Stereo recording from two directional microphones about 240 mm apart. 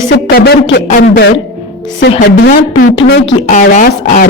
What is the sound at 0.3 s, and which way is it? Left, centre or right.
Speech, left.